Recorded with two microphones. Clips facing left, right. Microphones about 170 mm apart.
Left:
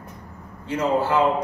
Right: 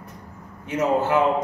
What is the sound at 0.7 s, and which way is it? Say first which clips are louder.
Speech: right 1 dB; 20° right (ahead or behind).